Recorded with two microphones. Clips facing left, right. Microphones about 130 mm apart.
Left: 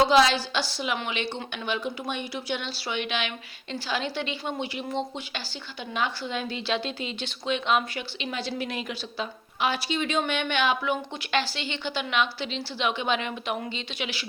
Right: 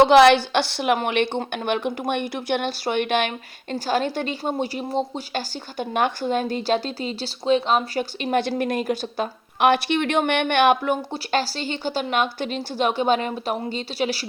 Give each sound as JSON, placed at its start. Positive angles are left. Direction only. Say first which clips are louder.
{"t": 0.0, "sound": "a woman's voice", "louder": "right 7 dB", "side_deg": -65}
{"t": 11.1, "sound": "a woman's voice", "louder": "right 4 dB", "side_deg": -40}